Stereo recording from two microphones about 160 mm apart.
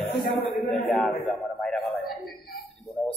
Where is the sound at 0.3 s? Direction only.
40° left (ahead or behind).